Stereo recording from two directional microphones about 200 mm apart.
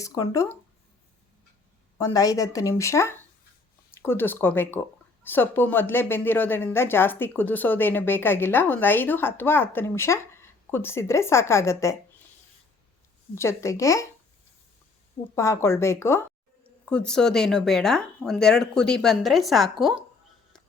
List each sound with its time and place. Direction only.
0.0 s speech: 15° left (ahead or behind)
2.0 s speech: 15° left (ahead or behind)
13.3 s speech: 15° left (ahead or behind)
15.4 s speech: 15° left (ahead or behind)